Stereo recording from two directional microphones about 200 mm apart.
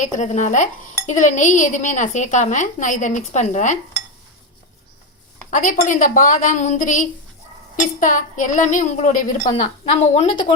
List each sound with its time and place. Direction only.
0.0 s dishes: 40° left (ahead or behind)
5.5 s dishes: 40° left (ahead or behind)
9.5 s a woman's voice: 30° left (ahead or behind)